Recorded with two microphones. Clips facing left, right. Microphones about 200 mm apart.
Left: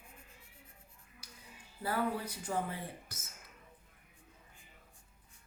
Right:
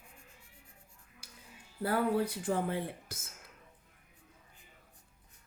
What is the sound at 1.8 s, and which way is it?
Speech, 60° right (ahead or behind).